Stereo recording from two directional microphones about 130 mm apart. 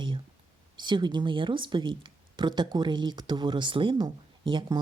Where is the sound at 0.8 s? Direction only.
35° right (ahead or behind).